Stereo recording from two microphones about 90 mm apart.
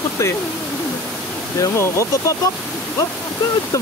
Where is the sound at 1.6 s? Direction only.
35° left (ahead or behind).